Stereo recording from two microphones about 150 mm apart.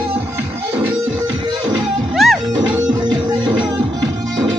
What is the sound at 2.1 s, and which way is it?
Music, centre (ahead or behind).